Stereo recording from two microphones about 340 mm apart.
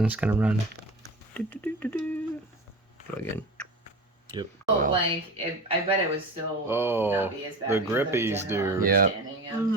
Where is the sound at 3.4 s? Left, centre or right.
Centre.